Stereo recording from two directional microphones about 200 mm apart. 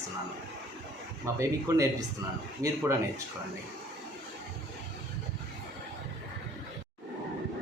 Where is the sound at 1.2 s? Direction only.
15° right (ahead or behind).